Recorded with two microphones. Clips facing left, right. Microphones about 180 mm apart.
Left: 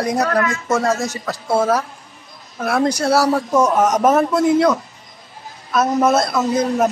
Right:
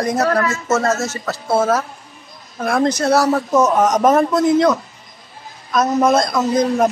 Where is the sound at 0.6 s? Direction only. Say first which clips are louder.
Right 1 dB; 15° left (ahead or behind).